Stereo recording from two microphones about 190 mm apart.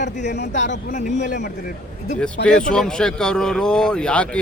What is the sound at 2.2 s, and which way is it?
Speech, 5° left (ahead or behind).